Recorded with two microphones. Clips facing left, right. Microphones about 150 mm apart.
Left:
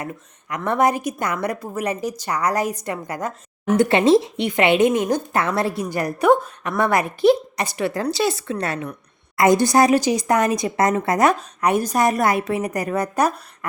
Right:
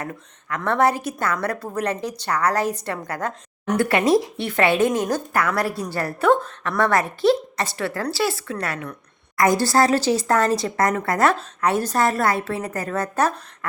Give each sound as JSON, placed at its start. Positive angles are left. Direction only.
{"t": 0.0, "sound": "speech", "side_deg": 15}
{"t": 3.8, "sound": "a woman's voice", "side_deg": 25}